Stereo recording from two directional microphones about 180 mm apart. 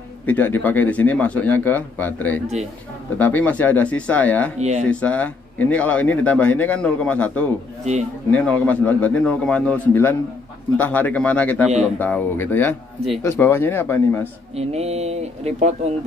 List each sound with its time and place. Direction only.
0.3 s a man's voice: 10° left (ahead or behind)
4.6 s speech: 40° right (ahead or behind)
4.8 s a man's voice: 5° left (ahead or behind)
14.5 s speech: 35° right (ahead or behind)